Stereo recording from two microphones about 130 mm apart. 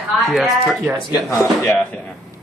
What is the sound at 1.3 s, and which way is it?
Speech, 15° left (ahead or behind).